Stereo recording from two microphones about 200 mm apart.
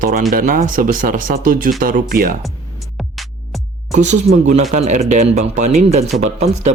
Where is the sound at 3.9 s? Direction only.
35° right (ahead or behind).